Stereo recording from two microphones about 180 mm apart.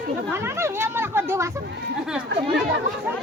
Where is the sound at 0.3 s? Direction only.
15° right (ahead or behind).